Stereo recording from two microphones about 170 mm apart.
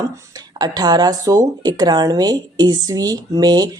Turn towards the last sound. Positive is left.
turn(degrees=-25)  # may be behind; listen again after turning